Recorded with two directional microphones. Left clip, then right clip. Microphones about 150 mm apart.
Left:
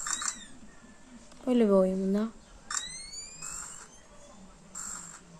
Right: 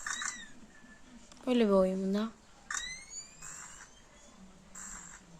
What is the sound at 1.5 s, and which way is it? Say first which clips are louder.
Speech: left 3 dB; centre (ahead or behind).